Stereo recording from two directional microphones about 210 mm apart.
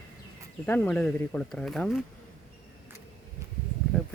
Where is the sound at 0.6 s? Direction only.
10° left (ahead or behind).